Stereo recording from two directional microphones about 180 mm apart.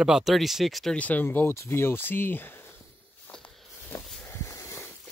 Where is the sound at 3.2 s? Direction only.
5° left (ahead or behind).